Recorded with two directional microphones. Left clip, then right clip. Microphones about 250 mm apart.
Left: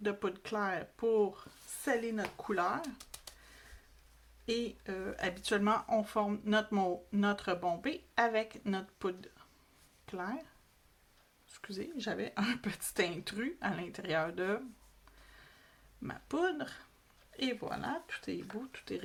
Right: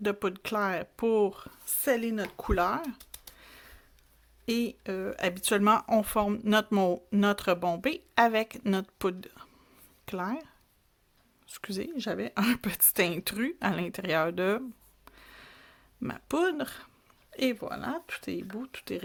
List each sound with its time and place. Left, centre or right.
0.0 s speech: right
4.4 s speech: right
11.4 s speech: right
15.3 s a sound: right
17.3 s speech: right